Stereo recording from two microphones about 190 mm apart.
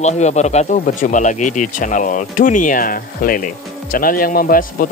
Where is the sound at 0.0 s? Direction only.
35° left (ahead or behind).